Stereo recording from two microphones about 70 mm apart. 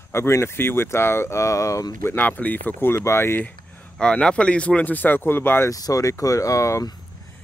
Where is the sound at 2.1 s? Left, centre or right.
Left.